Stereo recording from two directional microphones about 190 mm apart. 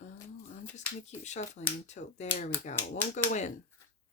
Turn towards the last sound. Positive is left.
turn(degrees=40)  # may be behind; listen again after turning